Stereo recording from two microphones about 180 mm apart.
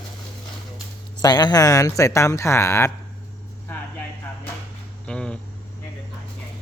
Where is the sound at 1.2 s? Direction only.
25° left (ahead or behind).